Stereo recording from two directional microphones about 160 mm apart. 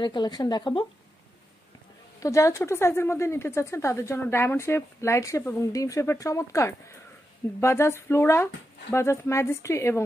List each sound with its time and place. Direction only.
0.0 s speech: 25° left (ahead or behind)
2.2 s speech: 20° left (ahead or behind)